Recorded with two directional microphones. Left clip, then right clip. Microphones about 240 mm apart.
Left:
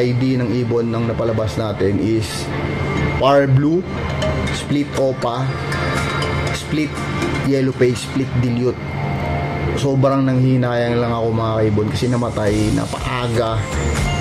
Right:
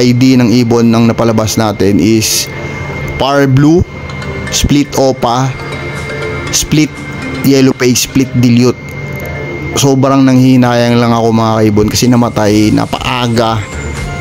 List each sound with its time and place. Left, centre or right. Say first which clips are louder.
0.0 s a man's voice: right 10 dB; right
6.5 s a man's voice: right 10 dB; right
9.8 s a man's voice: right 9 dB; right